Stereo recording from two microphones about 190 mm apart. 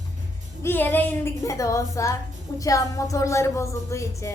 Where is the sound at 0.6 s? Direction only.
10° left (ahead or behind).